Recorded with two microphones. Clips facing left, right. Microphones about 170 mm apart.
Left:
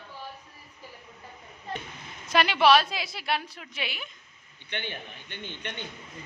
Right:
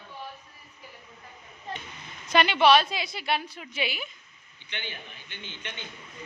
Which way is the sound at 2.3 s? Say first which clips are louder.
Right 1 dB; centre (ahead or behind).